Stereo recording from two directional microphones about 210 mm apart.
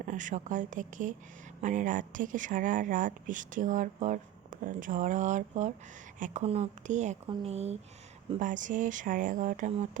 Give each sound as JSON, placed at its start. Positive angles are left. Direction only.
{"t": 0.0, "sound": "speech", "side_deg": -35}